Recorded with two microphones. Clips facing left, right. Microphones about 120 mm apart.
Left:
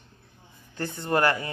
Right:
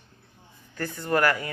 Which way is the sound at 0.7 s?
25° left (ahead or behind).